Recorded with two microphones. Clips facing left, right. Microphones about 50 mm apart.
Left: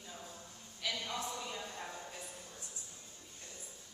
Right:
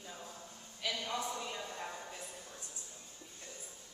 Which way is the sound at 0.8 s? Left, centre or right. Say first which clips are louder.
Right 2 dB; centre.